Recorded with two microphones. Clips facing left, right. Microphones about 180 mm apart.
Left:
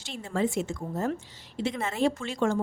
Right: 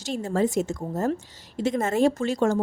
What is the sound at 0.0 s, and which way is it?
A woman's voice, 40° right (ahead or behind).